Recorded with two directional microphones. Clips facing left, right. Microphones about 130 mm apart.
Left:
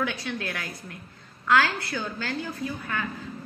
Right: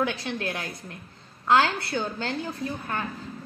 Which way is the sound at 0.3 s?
25° right (ahead or behind).